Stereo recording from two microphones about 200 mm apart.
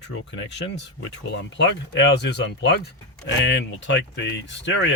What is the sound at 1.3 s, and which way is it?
Speech, 60° left (ahead or behind).